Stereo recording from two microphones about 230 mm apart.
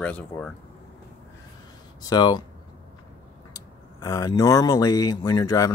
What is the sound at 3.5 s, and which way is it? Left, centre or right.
Speech, centre.